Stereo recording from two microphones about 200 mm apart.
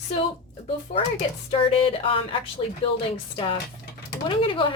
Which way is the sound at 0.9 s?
30° left (ahead or behind).